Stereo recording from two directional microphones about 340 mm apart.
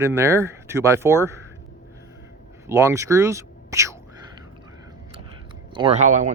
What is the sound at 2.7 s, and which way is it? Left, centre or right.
Speech, centre.